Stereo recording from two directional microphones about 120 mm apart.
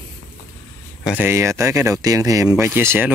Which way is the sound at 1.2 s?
20° right (ahead or behind).